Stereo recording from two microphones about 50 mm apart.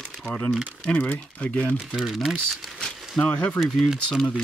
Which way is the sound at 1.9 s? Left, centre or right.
Centre.